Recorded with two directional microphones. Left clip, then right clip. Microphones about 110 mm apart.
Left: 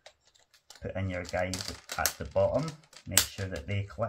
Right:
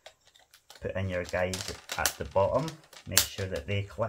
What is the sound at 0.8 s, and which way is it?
Speech, 35° right (ahead or behind).